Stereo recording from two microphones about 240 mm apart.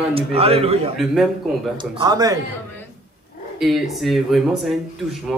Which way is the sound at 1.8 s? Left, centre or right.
Centre.